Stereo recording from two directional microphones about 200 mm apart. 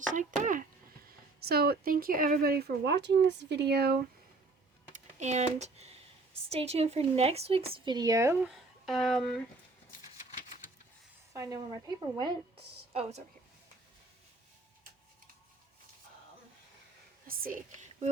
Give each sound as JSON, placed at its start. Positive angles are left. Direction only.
{"t": 0.1, "sound": "speech", "side_deg": -40}
{"t": 4.9, "sound": "computer keyboard", "side_deg": -35}
{"t": 6.5, "sound": "speech", "side_deg": -30}
{"t": 8.5, "sound": "speech", "side_deg": 0}
{"t": 11.3, "sound": "speech", "side_deg": -15}
{"t": 12.9, "sound": "a woman's voice", "side_deg": -30}
{"t": 17.2, "sound": "a sound", "side_deg": -45}